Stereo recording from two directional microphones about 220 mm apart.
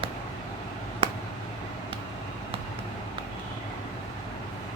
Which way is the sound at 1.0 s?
25° right (ahead or behind).